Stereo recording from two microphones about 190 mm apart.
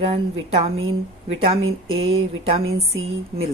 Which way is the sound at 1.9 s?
30° right (ahead or behind).